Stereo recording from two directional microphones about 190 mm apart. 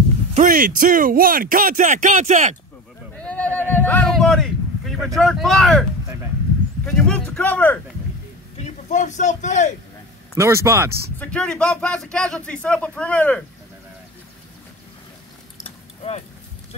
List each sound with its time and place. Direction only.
0.3 s speech: 45° right (ahead or behind)
3.2 s a sound: 5° left (ahead or behind)
6.8 s speech: 5° left (ahead or behind)
8.5 s a man's voice: 35° left (ahead or behind)
10.3 s speech: 15° right (ahead or behind)
10.9 s speech: 55° right (ahead or behind)
11.1 s speech: 5° left (ahead or behind)
15.6 s keys jangling: 30° left (ahead or behind)